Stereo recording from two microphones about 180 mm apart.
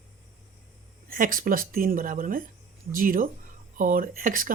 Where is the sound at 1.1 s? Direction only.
50° right (ahead or behind).